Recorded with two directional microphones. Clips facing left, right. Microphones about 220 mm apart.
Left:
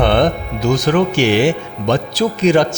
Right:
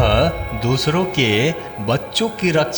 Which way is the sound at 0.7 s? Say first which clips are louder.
Left 3 dB; 50° left (ahead or behind).